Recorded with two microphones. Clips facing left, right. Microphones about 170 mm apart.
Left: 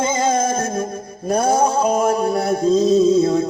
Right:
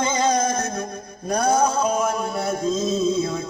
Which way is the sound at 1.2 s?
25° left (ahead or behind).